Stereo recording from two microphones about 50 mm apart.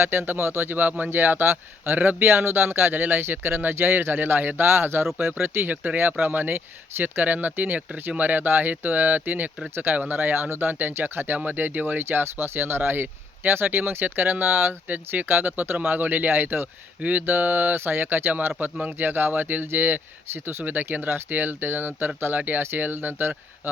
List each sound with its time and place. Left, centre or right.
0.0 s speech: right
1.1 s speech: right
2.0 s speech: right
2.2 s speech: right
5.7 s speech: right
12.0 s speech: right